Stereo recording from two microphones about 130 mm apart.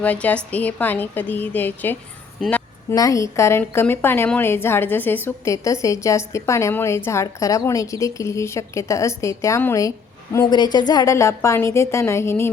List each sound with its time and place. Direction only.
0.0 s a woman's voice: 10° left (ahead or behind)
2.4 s a sound: 10° left (ahead or behind)
2.9 s a woman's voice: 25° left (ahead or behind)
10.3 s a woman's voice: 30° left (ahead or behind)